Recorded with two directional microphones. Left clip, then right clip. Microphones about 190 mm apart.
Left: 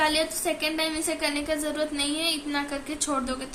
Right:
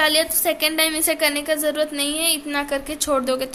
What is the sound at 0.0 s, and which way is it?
A woman's voice, 50° right (ahead or behind).